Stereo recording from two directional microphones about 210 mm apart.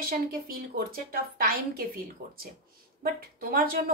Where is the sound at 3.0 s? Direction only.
45° right (ahead or behind).